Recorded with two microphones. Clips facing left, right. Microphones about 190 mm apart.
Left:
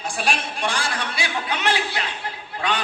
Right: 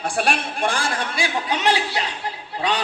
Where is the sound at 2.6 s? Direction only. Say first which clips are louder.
Right 2 dB; 35° right (ahead or behind).